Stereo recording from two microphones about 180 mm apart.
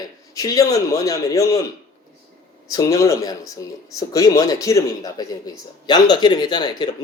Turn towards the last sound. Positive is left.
turn(degrees=25)  # may be behind; listen again after turning